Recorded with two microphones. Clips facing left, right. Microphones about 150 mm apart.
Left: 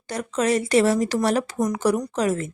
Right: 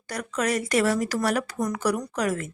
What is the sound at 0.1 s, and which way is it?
Speech, 25° left (ahead or behind).